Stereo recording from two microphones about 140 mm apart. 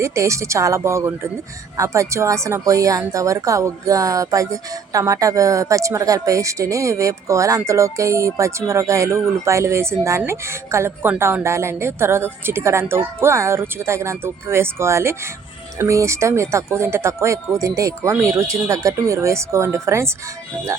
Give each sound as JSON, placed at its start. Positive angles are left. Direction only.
{"t": 0.0, "sound": "a woman's voice", "side_deg": -20}